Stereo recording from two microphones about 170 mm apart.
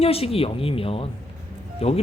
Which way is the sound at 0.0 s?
35° left (ahead or behind).